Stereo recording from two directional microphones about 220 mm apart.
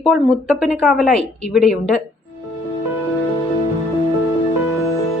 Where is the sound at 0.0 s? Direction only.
Centre (ahead or behind).